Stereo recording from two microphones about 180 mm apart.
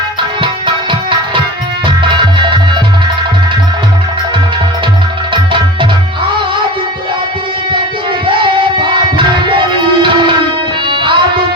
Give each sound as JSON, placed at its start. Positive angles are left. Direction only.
{"t": 0.4, "sound": "music", "side_deg": -25}
{"t": 8.3, "sound": "music", "side_deg": -25}